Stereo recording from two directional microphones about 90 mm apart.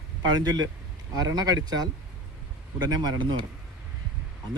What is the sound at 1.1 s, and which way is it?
Speech, 45° right (ahead or behind).